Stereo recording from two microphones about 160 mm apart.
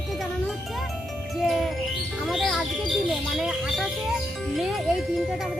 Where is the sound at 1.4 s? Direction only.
Centre (ahead or behind).